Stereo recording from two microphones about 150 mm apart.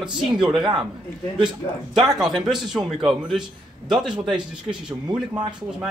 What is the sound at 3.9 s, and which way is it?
Speech, 5° right (ahead or behind).